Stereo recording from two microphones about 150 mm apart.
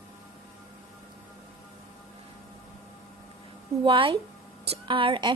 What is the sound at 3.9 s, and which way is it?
A woman's voice, 35° right (ahead or behind).